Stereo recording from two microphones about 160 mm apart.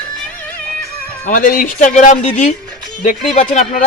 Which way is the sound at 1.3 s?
60° left (ahead or behind).